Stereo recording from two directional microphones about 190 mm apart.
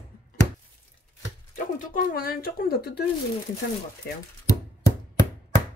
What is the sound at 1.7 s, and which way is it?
Speech, 45° left (ahead or behind).